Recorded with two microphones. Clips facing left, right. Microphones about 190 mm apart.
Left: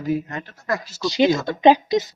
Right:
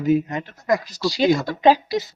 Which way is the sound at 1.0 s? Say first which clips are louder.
Left 2 dB; 20° left (ahead or behind).